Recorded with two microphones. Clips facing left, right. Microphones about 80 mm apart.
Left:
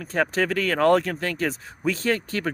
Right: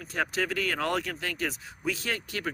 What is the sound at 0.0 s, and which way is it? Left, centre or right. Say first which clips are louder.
Speech: left 7 dB; left.